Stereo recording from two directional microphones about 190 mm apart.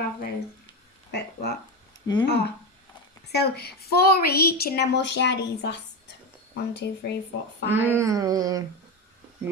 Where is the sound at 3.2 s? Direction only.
60° left (ahead or behind).